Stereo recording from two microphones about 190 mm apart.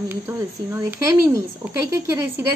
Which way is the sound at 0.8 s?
15° right (ahead or behind).